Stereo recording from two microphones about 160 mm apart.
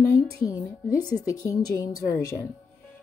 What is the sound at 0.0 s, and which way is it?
A woman's voice, 20° left (ahead or behind).